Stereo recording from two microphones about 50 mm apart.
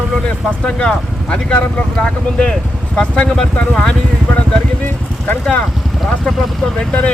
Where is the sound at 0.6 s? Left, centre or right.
Centre.